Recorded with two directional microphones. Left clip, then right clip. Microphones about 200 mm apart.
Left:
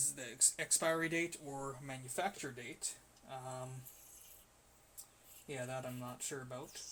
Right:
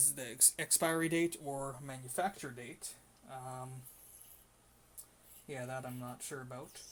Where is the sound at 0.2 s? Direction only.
50° right (ahead or behind).